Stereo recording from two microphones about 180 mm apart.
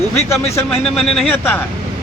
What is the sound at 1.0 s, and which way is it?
Speech, 5° left (ahead or behind).